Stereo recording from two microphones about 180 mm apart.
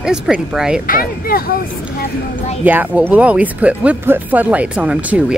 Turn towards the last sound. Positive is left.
turn(degrees=-5)  # may be behind; listen again after turning